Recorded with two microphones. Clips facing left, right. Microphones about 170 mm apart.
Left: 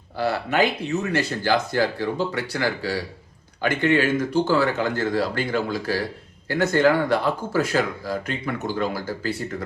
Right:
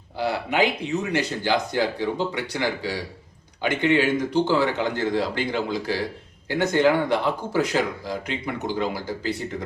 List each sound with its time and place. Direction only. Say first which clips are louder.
0.2 s speech: left 1 dB; 15° right (ahead or behind)